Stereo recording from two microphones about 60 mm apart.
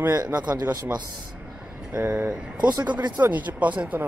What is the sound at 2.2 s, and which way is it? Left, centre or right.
Speech, centre.